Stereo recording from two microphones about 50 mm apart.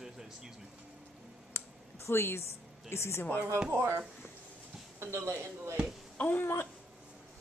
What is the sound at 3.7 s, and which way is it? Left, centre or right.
Speech, right.